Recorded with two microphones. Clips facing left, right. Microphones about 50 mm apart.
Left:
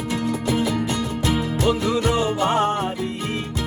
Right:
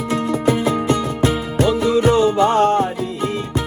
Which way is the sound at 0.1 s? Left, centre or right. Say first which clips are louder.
Right 4 dB; right.